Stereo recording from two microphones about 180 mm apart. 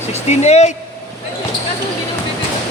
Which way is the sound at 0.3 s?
35° left (ahead or behind).